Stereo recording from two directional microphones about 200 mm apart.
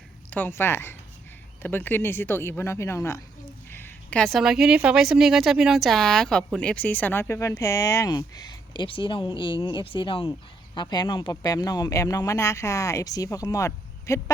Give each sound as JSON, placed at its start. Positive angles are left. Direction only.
{"t": 0.3, "sound": "speech", "side_deg": 10}